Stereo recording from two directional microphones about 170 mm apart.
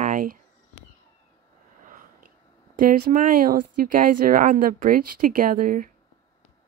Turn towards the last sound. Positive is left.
turn(degrees=-50)  # may be behind; listen again after turning